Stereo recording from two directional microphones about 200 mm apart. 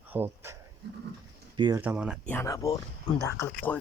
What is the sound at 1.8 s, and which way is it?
Speech, 5° right (ahead or behind).